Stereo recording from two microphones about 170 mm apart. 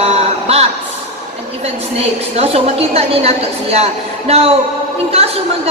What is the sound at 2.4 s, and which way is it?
Speech, 35° right (ahead or behind).